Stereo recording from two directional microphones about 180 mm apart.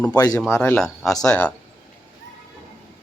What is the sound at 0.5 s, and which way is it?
Speech, 10° left (ahead or behind).